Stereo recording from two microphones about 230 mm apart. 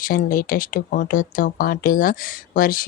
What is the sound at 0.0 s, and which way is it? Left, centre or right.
Speech, left.